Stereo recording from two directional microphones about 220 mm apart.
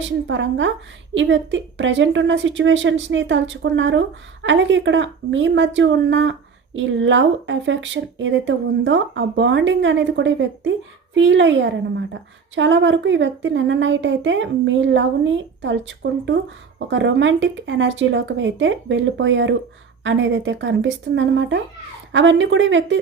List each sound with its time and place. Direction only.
0.0 s a woman's voice: 55° right (ahead or behind)